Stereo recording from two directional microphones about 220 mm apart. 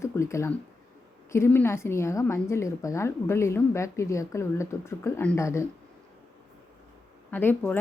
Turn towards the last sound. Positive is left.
turn(degrees=10)  # may be behind; listen again after turning